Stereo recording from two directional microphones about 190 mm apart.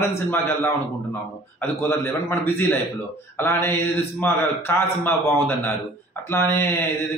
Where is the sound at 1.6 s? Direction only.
10° left (ahead or behind).